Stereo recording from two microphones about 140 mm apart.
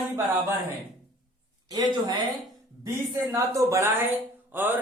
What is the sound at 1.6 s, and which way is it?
A man's voice, 30° right (ahead or behind).